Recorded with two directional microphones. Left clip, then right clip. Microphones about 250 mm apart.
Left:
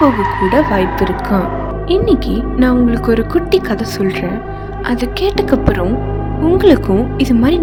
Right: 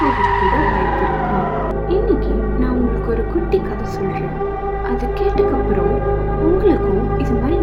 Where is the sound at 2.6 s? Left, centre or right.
Left.